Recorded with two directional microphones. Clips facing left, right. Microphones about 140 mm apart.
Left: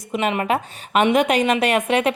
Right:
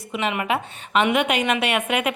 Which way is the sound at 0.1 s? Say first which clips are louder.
Left 3 dB; 40° left (ahead or behind).